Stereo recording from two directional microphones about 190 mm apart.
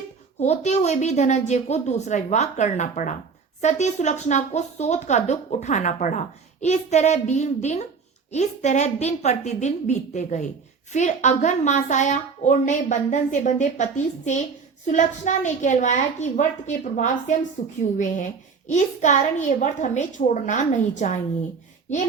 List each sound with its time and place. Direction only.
0.3 s speech: 35° left (ahead or behind)